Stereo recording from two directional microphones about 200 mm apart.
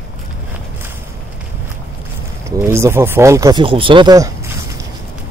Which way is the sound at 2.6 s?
15° right (ahead or behind).